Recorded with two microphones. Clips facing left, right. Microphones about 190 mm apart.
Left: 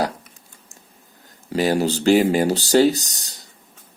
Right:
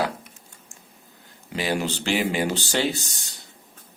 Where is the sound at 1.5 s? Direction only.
40° left (ahead or behind).